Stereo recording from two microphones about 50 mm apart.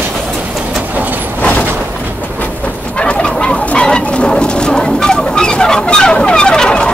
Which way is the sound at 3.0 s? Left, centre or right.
Left.